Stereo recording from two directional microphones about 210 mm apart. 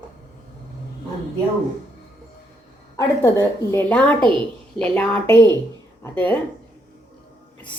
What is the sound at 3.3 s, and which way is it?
A woman's voice, 10° left (ahead or behind).